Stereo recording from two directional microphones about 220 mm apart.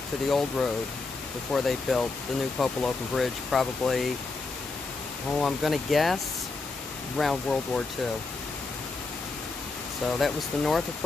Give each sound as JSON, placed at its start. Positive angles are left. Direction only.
{"t": 0.3, "sound": "speech", "side_deg": 0}
{"t": 5.4, "sound": "speech", "side_deg": 0}
{"t": 7.2, "sound": "speech", "side_deg": 0}
{"t": 10.2, "sound": "speech", "side_deg": 0}